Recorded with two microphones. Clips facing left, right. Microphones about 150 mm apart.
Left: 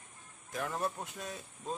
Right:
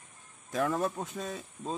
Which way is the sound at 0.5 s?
80° right.